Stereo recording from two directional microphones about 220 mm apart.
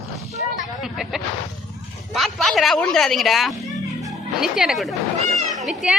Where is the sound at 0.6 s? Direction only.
Centre (ahead or behind).